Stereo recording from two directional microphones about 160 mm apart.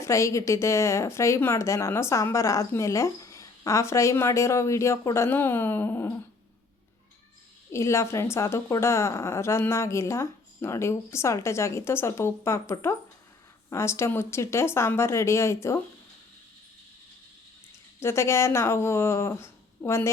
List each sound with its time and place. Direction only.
0.0 s a woman's voice: 20° left (ahead or behind)
7.7 s a woman's voice: 15° left (ahead or behind)
18.0 s a woman's voice: 15° left (ahead or behind)